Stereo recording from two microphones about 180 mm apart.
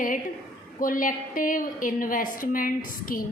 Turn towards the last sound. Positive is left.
turn(degrees=50)  # may be behind; listen again after turning